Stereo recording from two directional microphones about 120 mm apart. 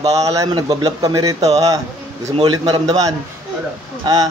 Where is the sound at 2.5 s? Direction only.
30° right (ahead or behind).